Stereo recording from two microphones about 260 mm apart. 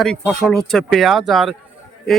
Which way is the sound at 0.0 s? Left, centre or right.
Centre.